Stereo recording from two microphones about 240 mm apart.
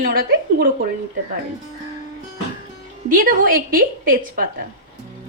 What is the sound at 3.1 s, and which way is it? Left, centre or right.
A woman's voice, right.